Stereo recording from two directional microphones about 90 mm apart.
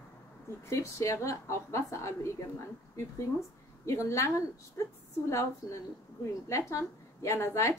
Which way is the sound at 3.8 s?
35° left (ahead or behind).